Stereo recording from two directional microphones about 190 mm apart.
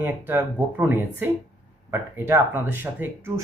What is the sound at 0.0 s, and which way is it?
Speech, 10° right (ahead or behind).